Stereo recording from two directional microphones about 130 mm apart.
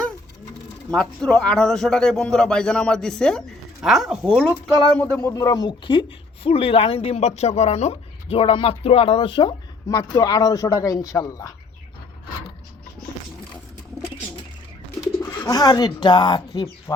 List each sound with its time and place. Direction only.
0.9 s a man's voice: 5° left (ahead or behind)
4.5 s speech: 10° left (ahead or behind); by 9.9 s 35° left (ahead or behind)
9.9 s speech: 25° left (ahead or behind)
15.0 s speech: 25° left (ahead or behind)